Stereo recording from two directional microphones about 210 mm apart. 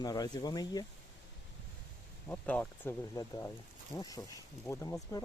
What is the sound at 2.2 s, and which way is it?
Speech, 5° left (ahead or behind).